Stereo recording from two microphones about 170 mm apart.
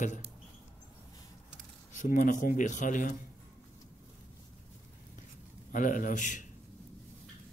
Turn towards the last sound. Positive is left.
turn(degrees=45)  # may be behind; listen again after turning